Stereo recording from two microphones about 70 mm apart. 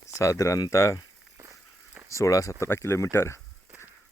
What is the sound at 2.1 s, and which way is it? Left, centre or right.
Speech, left.